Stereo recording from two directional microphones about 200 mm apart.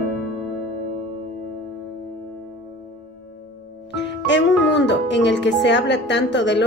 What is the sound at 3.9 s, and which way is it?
Speech, 60° left (ahead or behind).